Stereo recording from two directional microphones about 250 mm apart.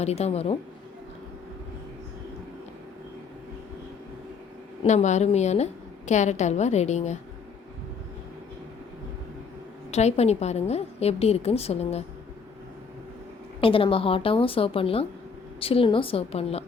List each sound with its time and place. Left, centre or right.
0.0 s a woman's voice: left
4.8 s a woman's voice: left
9.9 s a woman's voice: left
13.6 s a woman's voice: left